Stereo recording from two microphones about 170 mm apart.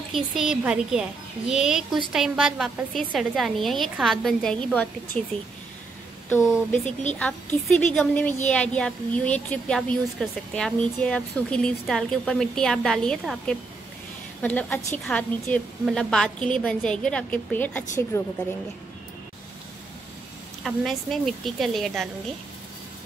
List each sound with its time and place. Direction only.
0.1 s a woman's voice: centre (ahead or behind)
6.2 s a woman's voice: 10° left (ahead or behind)
20.6 s a woman's voice: centre (ahead or behind)